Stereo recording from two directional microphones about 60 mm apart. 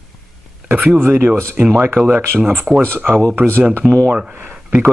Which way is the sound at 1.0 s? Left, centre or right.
Right.